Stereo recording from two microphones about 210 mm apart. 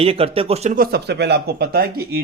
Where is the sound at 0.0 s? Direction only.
25° right (ahead or behind).